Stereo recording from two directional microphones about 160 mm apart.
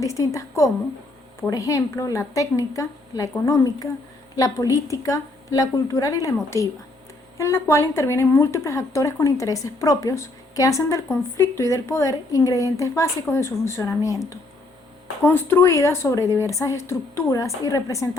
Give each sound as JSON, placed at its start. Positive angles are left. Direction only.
{"t": 0.0, "sound": "speech", "side_deg": 20}
{"t": 15.2, "sound": "speech", "side_deg": 15}